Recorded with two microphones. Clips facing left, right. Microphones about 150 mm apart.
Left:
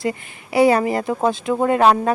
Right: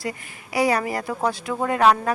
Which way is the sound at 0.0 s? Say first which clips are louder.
Left 7 dB; 25° left (ahead or behind).